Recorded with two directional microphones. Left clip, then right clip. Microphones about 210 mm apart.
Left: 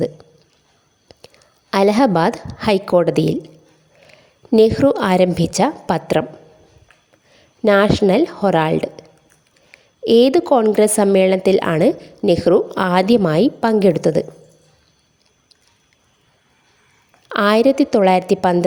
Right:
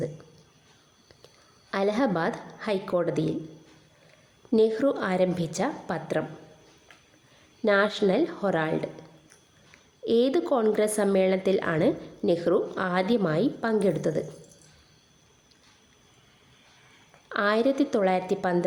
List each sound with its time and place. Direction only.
1.1 s whispering: 30° left (ahead or behind)
1.7 s a woman's voice: 40° left (ahead or behind)
4.5 s a woman's voice: 40° left (ahead or behind)
7.6 s a woman's voice: 40° left (ahead or behind)
17.2 s a woman's voice: 40° left (ahead or behind)